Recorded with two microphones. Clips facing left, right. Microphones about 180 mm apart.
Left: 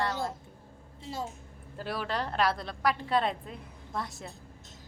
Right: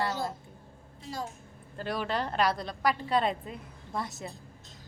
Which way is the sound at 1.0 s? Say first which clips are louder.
Even; 25° left (ahead or behind).